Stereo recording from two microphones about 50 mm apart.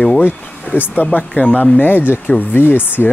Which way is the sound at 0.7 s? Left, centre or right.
Left.